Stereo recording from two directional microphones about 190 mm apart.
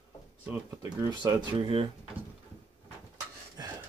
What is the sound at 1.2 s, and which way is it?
Speech, 25° right (ahead or behind).